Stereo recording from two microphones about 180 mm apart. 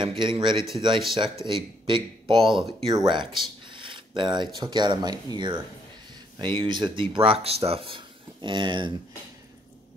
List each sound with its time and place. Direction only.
0.2 s speech: 25° right (ahead or behind)
3.6 s a sound: 30° right (ahead or behind)
4.6 s speech: 25° right (ahead or behind)